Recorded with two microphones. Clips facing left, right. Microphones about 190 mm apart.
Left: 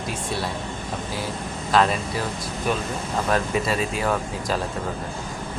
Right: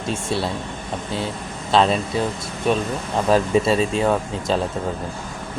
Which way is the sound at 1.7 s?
25° right (ahead or behind).